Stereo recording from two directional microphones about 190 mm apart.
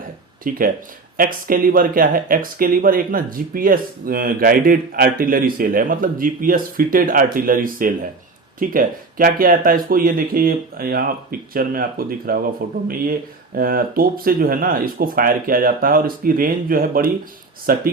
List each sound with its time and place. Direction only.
0.4 s speech: 45° right (ahead or behind)
13.6 s speech: 50° right (ahead or behind)